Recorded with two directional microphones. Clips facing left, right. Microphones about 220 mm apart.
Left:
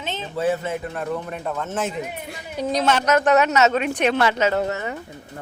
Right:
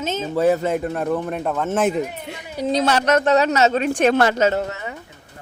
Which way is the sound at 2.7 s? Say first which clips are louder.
Right 2 dB; 35° right (ahead or behind).